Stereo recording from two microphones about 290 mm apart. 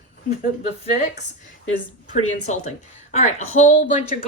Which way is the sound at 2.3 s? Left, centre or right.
Left.